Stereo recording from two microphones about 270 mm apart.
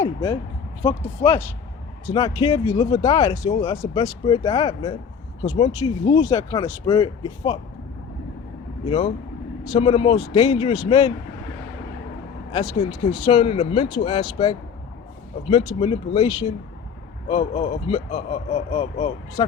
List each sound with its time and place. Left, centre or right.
0.0 s speech: centre
8.9 s speech: centre
12.5 s speech: centre